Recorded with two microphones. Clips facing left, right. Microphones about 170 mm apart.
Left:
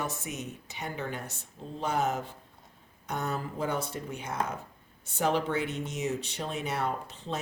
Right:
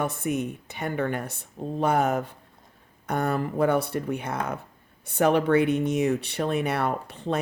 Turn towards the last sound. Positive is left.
turn(degrees=-60)  # may be behind; listen again after turning